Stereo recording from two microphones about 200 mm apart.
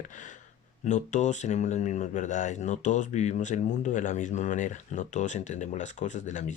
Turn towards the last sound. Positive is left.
turn(degrees=40)  # may be behind; listen again after turning